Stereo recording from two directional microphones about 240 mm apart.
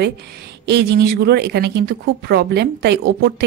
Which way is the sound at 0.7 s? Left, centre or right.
Right.